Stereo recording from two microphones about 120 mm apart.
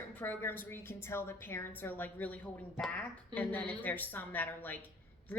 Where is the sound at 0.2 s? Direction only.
15° left (ahead or behind).